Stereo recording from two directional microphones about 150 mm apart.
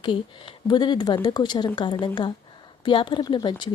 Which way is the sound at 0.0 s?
35° left (ahead or behind).